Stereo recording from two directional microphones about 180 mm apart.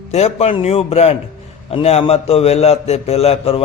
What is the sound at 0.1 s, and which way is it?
A man's voice, 35° left (ahead or behind).